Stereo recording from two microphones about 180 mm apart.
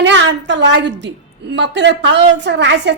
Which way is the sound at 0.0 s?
90° right.